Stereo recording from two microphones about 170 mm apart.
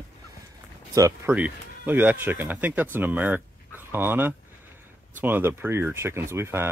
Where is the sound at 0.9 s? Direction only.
20° right (ahead or behind).